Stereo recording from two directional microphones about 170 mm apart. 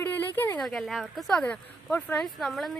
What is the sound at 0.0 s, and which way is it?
Speech, 10° left (ahead or behind).